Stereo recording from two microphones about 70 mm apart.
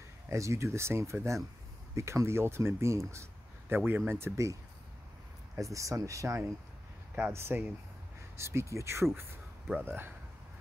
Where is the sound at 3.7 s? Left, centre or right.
Right.